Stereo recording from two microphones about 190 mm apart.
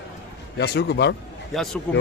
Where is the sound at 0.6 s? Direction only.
60° left (ahead or behind).